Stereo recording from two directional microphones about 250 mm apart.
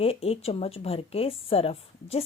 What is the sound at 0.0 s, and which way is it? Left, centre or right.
A woman's voice, left.